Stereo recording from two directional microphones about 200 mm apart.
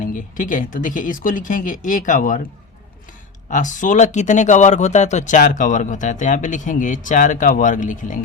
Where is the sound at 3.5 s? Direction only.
40° left (ahead or behind).